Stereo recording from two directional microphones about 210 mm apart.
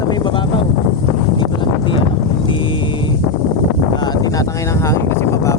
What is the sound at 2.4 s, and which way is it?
Vehicle, 25° left (ahead or behind).